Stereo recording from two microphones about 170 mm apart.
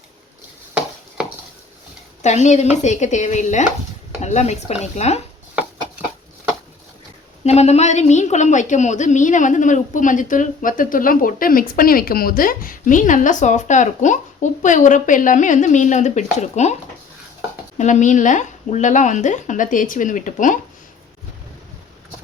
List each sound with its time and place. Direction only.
0.7 s a sound: 5° right (ahead or behind)
2.2 s a woman's voice: 40° left (ahead or behind)
7.4 s a woman's voice: 40° left (ahead or behind)
17.7 s a woman's voice: 45° left (ahead or behind)